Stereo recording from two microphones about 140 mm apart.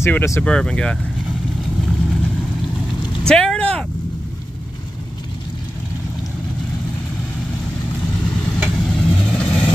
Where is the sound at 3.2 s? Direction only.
5° left (ahead or behind).